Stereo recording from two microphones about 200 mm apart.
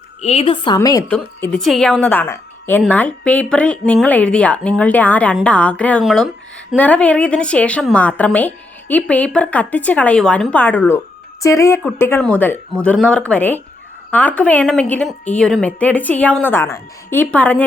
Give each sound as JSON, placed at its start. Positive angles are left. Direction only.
{"t": 0.2, "sound": "a woman's voice", "side_deg": 30}
{"t": 1.1, "sound": "a woman's voice", "side_deg": 5}